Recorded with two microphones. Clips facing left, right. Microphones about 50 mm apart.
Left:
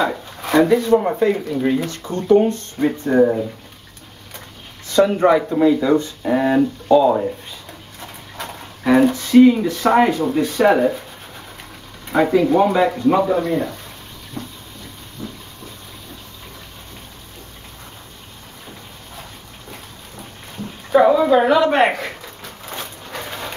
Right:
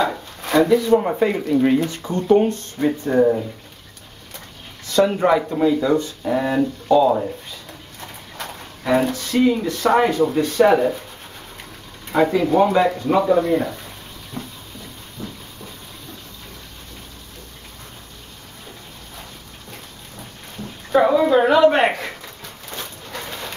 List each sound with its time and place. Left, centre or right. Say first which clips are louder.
0.0 s speech: left 1 dB; centre
1.2 s speech: even; centre
3.1 s speech: left 2 dB; centre
5.0 s speech: left 2 dB; centre
8.4 s a sound: left 2 dB; centre
9.3 s speech: left 7 dB; centre
10.2 s speech: even; centre
12.1 s speech: left 2 dB; centre
15.2 s a sound: left 1 dB; centre
20.9 s speech: left 2 dB; centre
22.4 s a sound: left 4 dB; centre